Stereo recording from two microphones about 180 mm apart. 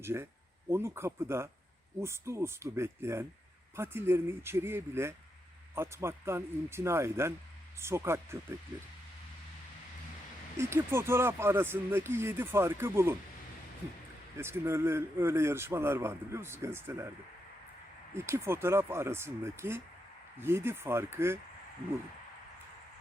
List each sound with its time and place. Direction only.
0.0 s speech: 15° right (ahead or behind)
10.6 s speech: 15° right (ahead or behind)
14.3 s speech: 15° right (ahead or behind)
18.1 s speech: 15° right (ahead or behind)